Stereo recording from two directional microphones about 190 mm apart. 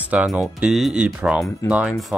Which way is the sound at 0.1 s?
5° right (ahead or behind).